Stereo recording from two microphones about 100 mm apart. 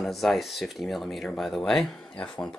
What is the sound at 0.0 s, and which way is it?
Speech, centre (ahead or behind).